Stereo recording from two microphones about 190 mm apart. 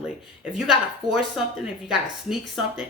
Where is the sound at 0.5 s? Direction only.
Centre (ahead or behind).